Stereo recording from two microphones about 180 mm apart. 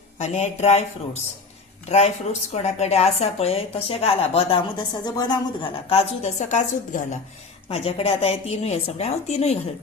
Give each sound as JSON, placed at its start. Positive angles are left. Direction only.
{"t": 0.2, "sound": "speech", "side_deg": 40}
{"t": 5.9, "sound": "speech", "side_deg": 40}
{"t": 7.7, "sound": "speech", "side_deg": 30}